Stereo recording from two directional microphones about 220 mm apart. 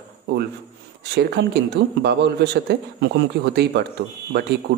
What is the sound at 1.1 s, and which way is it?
A man's voice, 50° right (ahead or behind).